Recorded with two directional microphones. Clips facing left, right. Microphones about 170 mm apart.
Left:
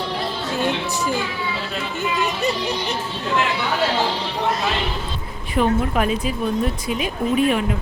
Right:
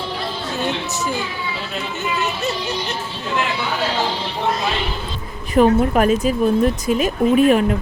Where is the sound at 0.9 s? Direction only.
15° left (ahead or behind).